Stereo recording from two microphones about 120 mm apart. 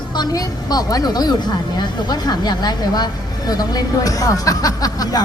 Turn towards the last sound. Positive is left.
turn(degrees=30)  # may be behind; listen again after turning